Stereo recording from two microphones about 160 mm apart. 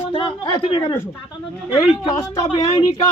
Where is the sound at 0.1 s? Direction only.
35° left (ahead or behind).